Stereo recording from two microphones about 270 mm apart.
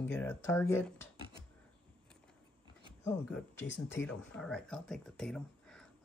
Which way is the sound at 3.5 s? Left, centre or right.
Left.